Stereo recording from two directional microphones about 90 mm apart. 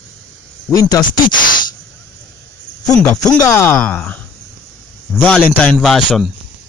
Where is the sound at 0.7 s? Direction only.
40° left (ahead or behind).